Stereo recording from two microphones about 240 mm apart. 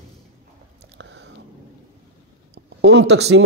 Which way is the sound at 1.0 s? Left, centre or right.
Right.